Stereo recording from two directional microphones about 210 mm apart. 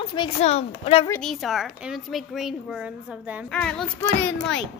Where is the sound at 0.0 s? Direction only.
25° left (ahead or behind).